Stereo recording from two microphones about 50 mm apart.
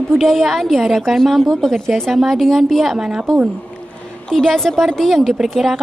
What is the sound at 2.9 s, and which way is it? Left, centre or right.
Speech, centre.